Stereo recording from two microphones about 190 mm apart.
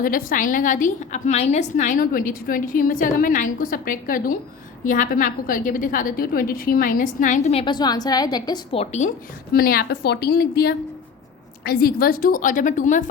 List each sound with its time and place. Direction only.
0.0 s a woman's voice: 45° left (ahead or behind)
7.6 s a woman's voice: 25° left (ahead or behind)
9.5 s a woman's voice: 50° left (ahead or behind)